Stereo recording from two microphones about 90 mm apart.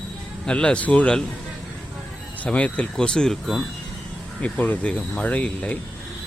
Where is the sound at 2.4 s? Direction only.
15° left (ahead or behind).